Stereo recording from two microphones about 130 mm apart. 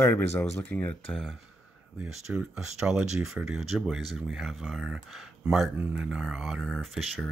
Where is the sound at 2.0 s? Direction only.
5° right (ahead or behind).